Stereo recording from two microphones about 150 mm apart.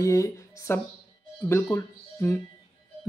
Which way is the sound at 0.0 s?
20° left (ahead or behind).